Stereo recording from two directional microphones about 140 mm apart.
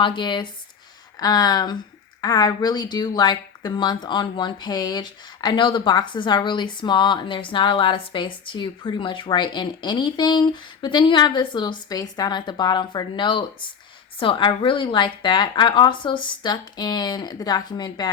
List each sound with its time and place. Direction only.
0.0 s a woman's voice: 35° left (ahead or behind)